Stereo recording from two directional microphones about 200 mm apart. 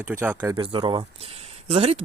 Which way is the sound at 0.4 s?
20° right (ahead or behind).